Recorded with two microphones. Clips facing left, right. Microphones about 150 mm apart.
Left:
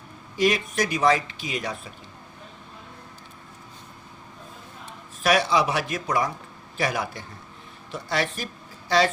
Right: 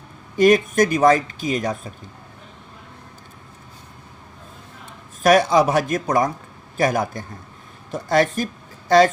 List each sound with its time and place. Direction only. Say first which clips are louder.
0.3 s speech: right 8 dB; 50° right (ahead or behind)
5.2 s speech: right 6 dB; 45° right (ahead or behind)